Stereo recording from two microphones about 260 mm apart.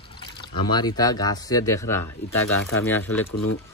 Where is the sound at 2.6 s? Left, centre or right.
Left.